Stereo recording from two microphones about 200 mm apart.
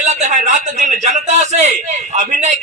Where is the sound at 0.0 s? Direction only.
35° right (ahead or behind).